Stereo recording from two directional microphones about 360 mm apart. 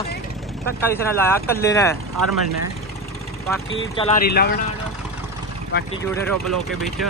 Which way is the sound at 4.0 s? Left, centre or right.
Left.